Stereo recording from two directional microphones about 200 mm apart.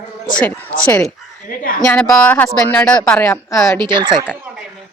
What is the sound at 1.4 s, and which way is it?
Speech, 45° left (ahead or behind).